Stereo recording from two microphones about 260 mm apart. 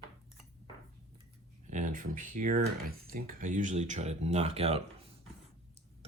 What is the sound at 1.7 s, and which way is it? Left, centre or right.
Speech, right.